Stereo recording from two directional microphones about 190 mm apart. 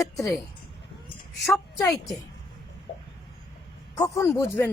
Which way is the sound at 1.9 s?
Centre (ahead or behind).